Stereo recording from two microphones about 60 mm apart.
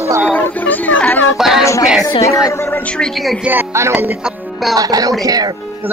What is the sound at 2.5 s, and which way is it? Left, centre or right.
Speech, left.